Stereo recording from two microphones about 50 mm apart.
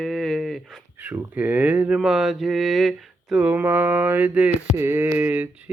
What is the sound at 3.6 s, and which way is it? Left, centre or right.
Mantra, right.